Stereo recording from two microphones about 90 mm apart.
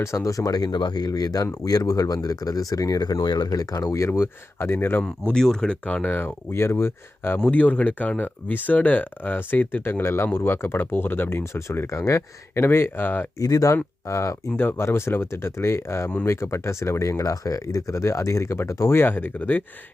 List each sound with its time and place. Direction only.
0.0 s speech: 35° left (ahead or behind)
5.0 s speech: 10° left (ahead or behind); by 7.3 s 25° left (ahead or behind)
7.3 s speech: 15° left (ahead or behind)
13.4 s speech: 40° left (ahead or behind); by 19.6 s 20° left (ahead or behind)